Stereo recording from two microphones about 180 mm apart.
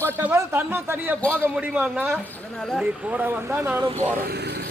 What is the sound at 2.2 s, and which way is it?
A man's voice, 5° left (ahead or behind).